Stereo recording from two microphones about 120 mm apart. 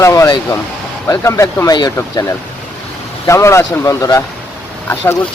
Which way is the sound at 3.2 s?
25° left (ahead or behind).